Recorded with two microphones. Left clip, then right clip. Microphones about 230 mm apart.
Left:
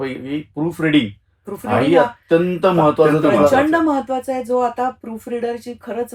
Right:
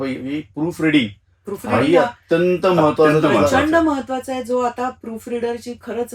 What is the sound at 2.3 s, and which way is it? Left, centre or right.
Speech, left.